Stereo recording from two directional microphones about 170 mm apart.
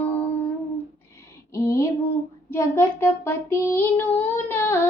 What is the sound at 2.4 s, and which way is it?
Child singing, 15° left (ahead or behind).